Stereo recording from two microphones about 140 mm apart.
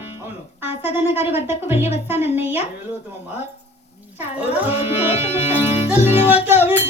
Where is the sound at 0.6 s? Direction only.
15° right (ahead or behind).